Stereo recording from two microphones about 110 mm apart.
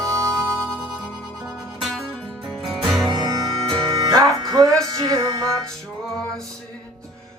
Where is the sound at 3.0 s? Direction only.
35° right (ahead or behind).